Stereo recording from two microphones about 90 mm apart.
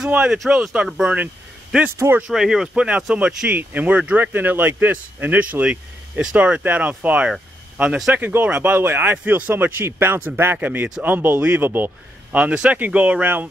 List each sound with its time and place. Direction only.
0.1 s speech: 15° right (ahead or behind)
1.1 s a sound: 15° right (ahead or behind)
2.1 s speech: 5° right (ahead or behind)